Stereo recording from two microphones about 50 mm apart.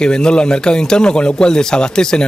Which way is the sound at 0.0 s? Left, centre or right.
Centre.